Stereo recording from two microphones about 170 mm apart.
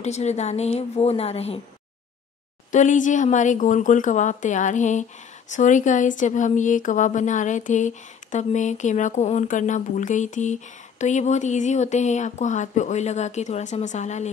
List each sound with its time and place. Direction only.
0.0 s a woman's voice: 40° left (ahead or behind)
2.7 s speech: 45° left (ahead or behind)